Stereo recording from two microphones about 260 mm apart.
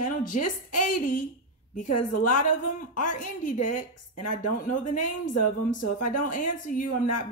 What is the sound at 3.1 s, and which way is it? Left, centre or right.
Speech, left.